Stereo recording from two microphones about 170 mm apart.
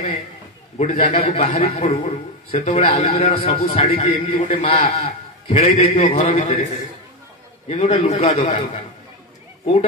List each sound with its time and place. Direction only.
0.7 s a man's voice: 40° left (ahead or behind)
4.4 s a man's voice: 50° left (ahead or behind)
4.9 s a man's voice: 40° left (ahead or behind)